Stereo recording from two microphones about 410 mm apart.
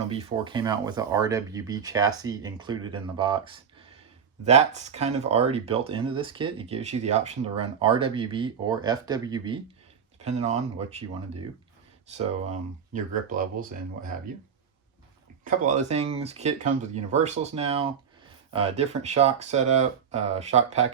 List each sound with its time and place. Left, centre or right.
0.1 s speech: centre
12.9 s speech: centre
15.4 s speech: centre